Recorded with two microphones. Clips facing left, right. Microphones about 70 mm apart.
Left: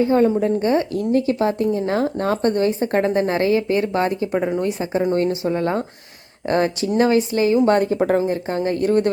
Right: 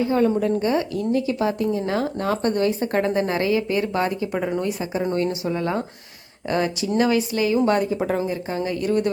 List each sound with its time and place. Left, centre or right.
0.0 s speech: left
4.3 s a woman's voice: centre
5.1 s speech: left
7.8 s speech: left